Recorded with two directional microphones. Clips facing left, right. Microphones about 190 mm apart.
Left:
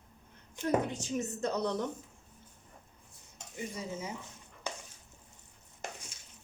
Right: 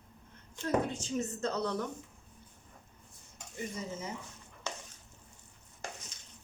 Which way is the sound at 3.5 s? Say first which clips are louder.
Even; 10° left (ahead or behind).